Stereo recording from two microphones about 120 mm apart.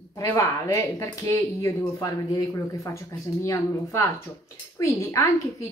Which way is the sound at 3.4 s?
25° left (ahead or behind).